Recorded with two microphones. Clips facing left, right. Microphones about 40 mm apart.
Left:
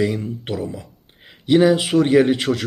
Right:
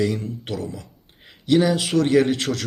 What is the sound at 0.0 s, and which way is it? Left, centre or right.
A man's voice, centre.